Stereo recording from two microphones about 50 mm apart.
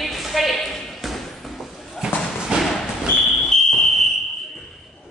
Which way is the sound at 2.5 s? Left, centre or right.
Centre.